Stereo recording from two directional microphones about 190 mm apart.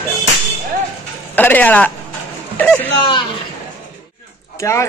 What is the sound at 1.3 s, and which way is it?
A man's voice, 10° left (ahead or behind).